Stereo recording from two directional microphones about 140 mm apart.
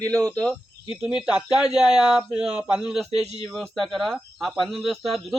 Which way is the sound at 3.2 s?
45° right (ahead or behind).